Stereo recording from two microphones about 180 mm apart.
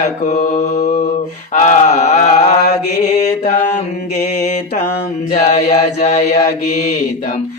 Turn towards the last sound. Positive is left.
turn(degrees=40)  # may be behind; listen again after turning